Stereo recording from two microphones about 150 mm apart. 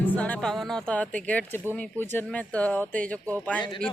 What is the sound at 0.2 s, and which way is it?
Speech, 5° left (ahead or behind).